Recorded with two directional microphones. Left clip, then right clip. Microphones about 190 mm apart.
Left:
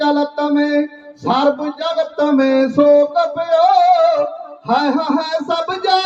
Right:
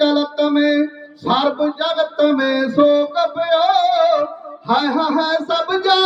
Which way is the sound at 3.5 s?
20° left (ahead or behind).